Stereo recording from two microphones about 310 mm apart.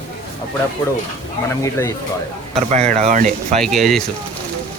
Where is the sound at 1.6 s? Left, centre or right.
Centre.